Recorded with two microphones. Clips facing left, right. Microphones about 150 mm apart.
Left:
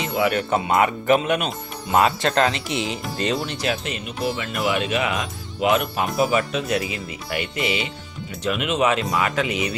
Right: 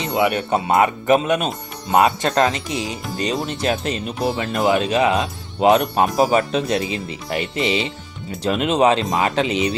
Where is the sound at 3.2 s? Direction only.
15° right (ahead or behind).